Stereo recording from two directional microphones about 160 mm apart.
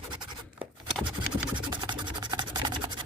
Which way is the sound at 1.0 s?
30° right (ahead or behind).